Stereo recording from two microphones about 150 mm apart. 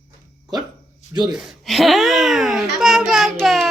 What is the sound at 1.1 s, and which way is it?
Speech, 30° right (ahead or behind).